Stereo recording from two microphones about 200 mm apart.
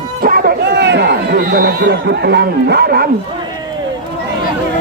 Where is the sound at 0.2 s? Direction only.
45° right (ahead or behind).